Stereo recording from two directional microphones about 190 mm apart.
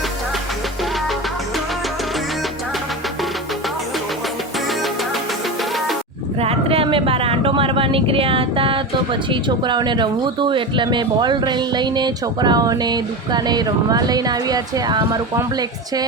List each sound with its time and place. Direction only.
6.4 s speech: 30° right (ahead or behind)